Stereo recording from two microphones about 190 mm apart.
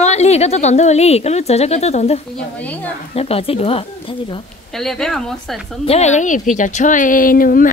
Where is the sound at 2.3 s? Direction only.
10° left (ahead or behind).